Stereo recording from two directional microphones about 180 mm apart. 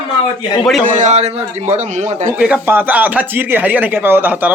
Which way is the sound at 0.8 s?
45° right (ahead or behind).